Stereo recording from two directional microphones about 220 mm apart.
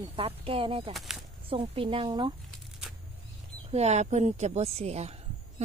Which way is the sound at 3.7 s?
30° right (ahead or behind).